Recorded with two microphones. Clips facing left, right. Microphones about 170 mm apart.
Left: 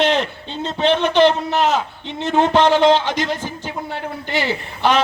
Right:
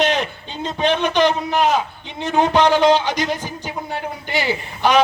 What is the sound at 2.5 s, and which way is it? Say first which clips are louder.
Speech: left 1 dB; 25° left (ahead or behind).